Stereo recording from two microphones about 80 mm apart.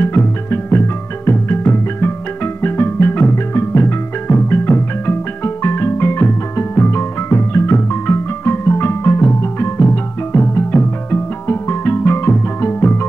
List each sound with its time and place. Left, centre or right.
0.0 s music: left
10.5 s music: left